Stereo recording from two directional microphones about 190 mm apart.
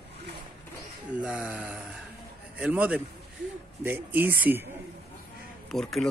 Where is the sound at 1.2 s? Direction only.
5° right (ahead or behind).